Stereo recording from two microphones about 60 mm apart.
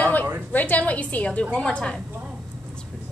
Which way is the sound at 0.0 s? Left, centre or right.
Left.